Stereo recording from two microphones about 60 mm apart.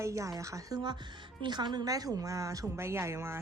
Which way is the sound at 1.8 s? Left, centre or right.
Right.